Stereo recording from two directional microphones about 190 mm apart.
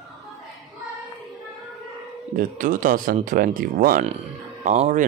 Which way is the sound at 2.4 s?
45° right (ahead or behind).